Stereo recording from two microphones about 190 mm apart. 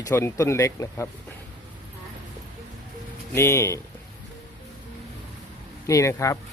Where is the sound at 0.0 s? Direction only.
15° left (ahead or behind).